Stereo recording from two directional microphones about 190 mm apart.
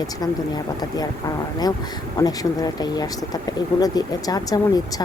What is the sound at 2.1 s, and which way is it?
Speech, 20° left (ahead or behind).